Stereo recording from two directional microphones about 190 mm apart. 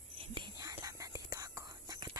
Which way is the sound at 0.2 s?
25° right (ahead or behind).